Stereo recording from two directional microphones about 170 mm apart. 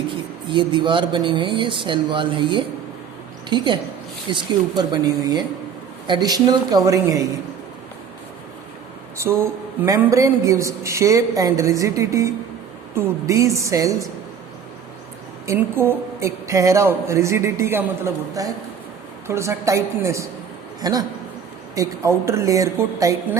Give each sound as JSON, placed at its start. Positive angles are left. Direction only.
{"t": 0.4, "sound": "speech", "side_deg": -30}
{"t": 9.1, "sound": "speech", "side_deg": -15}
{"t": 15.4, "sound": "speech", "side_deg": -15}